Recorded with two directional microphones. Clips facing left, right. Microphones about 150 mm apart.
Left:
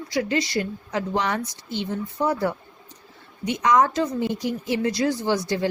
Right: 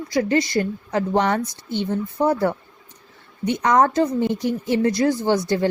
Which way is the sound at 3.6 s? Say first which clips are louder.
Right 2 dB; 45° right (ahead or behind).